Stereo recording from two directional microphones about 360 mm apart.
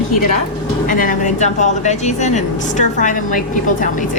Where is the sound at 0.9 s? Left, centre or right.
Left.